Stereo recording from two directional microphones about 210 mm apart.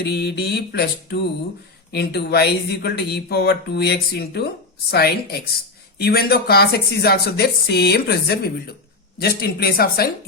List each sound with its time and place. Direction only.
0.0 s speech: 50° left (ahead or behind)